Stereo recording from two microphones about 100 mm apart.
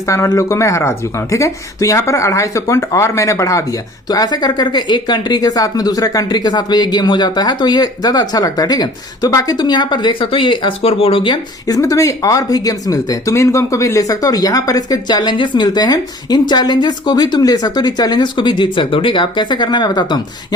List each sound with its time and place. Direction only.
0.1 s speech: 30° left (ahead or behind); by 11.3 s 60° left (ahead or behind)
11.7 s speech: 35° left (ahead or behind)